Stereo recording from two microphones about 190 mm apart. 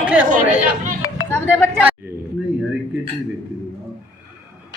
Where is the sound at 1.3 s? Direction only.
10° left (ahead or behind).